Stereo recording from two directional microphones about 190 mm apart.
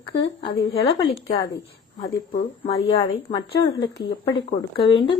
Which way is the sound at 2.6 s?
30° left (ahead or behind).